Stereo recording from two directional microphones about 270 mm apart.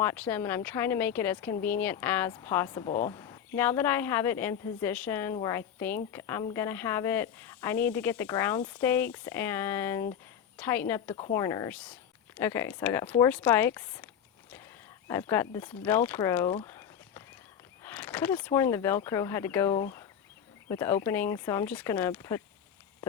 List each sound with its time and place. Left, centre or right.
0.0 s speech: centre
16.6 s walk: centre
17.8 s speech: centre